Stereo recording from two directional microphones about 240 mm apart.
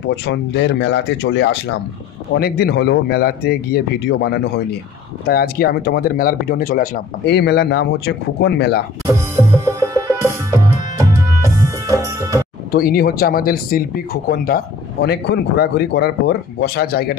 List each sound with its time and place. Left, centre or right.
0.0 s speech: left
9.7 s music: centre
12.7 s speech: left